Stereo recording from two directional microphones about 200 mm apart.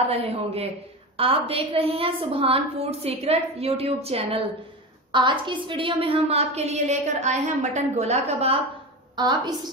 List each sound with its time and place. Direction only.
0.1 s a woman's voice: 30° right (ahead or behind)
9.1 s a woman's voice: 20° right (ahead or behind)